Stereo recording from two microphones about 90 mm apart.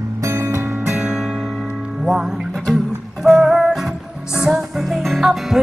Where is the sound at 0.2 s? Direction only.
30° right (ahead or behind).